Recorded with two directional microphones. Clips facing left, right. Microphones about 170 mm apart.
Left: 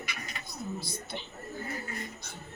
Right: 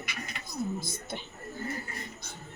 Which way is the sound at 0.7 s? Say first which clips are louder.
Right 1 dB; 50° right (ahead or behind).